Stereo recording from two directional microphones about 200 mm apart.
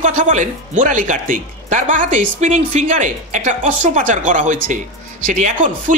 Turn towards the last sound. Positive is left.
turn(degrees=-40)  # may be behind; listen again after turning